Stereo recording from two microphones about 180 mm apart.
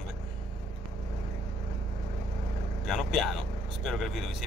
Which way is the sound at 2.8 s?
Centre (ahead or behind).